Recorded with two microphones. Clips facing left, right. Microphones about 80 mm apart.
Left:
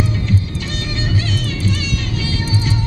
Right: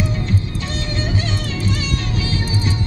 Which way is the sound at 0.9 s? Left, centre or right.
Right.